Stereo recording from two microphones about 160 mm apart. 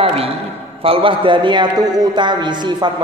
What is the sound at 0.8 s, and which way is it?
A man's voice, 35° right (ahead or behind).